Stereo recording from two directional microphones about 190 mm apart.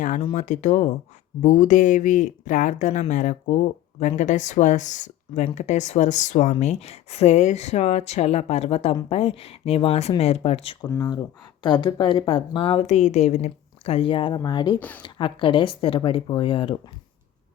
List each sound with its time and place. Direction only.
0.3 s speech: 40° left (ahead or behind)
10.8 s speech: 20° left (ahead or behind)
14.8 s speech: 10° left (ahead or behind)
15.0 s speech: 25° left (ahead or behind)